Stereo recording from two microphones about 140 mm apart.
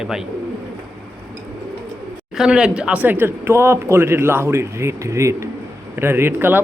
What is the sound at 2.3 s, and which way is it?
Speech, 5° right (ahead or behind).